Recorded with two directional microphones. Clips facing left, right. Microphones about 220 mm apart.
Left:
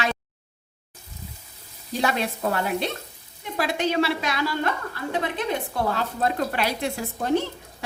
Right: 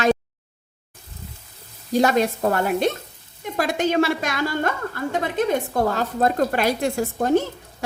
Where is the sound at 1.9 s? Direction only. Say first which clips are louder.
Right 7 dB; 45° right (ahead or behind).